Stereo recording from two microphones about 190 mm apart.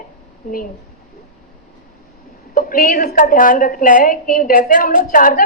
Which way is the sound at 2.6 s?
45° left (ahead or behind).